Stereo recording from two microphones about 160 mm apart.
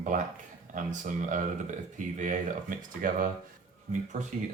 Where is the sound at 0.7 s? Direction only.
55° right (ahead or behind).